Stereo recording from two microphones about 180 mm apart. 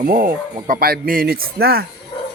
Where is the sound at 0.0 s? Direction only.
55° right (ahead or behind).